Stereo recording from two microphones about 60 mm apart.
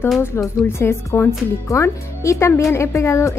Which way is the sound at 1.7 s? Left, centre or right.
Left.